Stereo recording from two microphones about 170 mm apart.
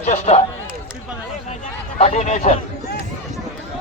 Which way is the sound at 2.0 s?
40° left (ahead or behind).